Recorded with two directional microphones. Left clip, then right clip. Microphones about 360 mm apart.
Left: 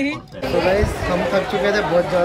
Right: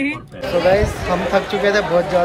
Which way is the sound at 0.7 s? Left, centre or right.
Centre.